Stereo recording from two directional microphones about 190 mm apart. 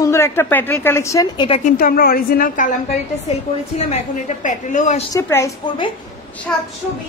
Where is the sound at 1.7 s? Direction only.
50° left (ahead or behind).